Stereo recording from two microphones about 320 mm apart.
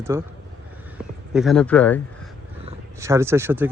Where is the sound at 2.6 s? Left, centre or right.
Centre.